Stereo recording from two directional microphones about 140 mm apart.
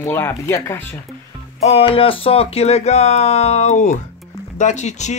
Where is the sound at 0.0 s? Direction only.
15° left (ahead or behind).